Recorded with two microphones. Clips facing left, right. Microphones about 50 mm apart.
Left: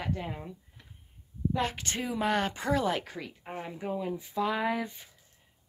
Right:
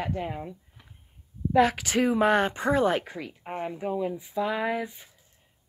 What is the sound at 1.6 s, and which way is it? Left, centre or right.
Speech, right.